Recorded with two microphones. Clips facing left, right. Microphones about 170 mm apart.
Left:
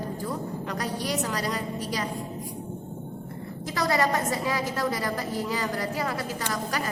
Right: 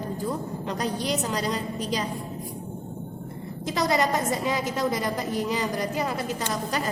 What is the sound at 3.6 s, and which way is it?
A woman's voice, 20° right (ahead or behind).